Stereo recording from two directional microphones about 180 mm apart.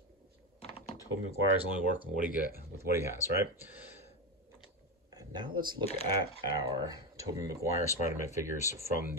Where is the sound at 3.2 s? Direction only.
20° left (ahead or behind).